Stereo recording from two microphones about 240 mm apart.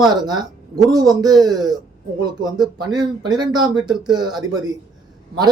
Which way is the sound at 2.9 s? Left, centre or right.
Centre.